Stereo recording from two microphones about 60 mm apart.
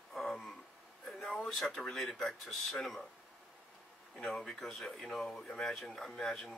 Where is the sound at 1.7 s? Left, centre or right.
Centre.